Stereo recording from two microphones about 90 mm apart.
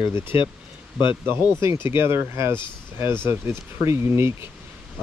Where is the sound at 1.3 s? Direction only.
30° right (ahead or behind).